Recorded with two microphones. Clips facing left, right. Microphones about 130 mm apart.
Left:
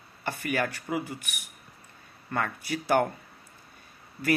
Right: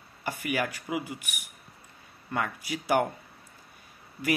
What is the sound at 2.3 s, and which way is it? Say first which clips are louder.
Speech: left 1 dB; 15° right (ahead or behind).